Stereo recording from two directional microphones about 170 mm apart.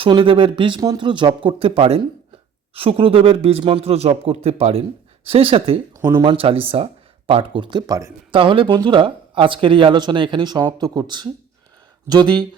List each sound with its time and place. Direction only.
0.0 s speech: 30° right (ahead or behind)
6.0 s speech: 15° right (ahead or behind)
6.2 s speech: 35° right (ahead or behind)
8.3 s speech: 30° right (ahead or behind)